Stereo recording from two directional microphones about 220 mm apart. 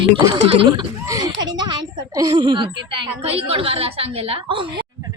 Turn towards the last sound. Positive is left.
turn(degrees=-25)  # may be behind; listen again after turning